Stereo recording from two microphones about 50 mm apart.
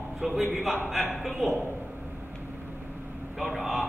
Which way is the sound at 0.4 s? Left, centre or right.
Centre.